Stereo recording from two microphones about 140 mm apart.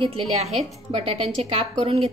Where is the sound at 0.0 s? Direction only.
45° right (ahead or behind).